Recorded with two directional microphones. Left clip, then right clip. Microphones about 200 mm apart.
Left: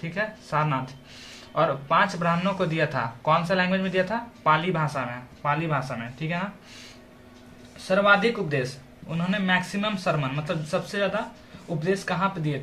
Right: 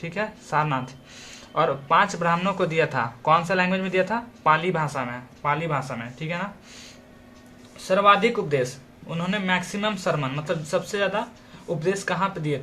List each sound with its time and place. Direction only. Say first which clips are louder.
0.0 s speech: even; 40° right (ahead or behind)
7.9 s a man's voice: right 2 dB; 45° right (ahead or behind)